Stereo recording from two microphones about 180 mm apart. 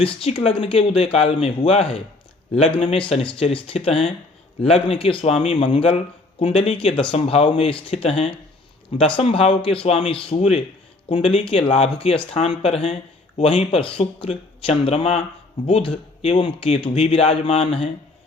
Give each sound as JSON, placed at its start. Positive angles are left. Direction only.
{"t": 0.0, "sound": "speech", "side_deg": 30}